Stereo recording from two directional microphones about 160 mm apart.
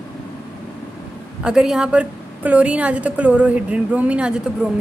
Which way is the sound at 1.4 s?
5° right (ahead or behind).